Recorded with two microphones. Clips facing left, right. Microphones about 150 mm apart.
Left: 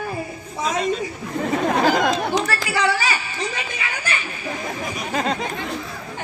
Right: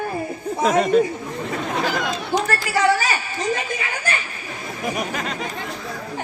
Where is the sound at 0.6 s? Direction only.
60° right (ahead or behind).